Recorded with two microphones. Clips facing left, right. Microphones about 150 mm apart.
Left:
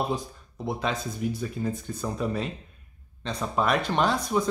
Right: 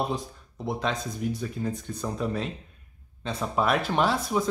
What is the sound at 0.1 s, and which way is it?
Speech, centre (ahead or behind).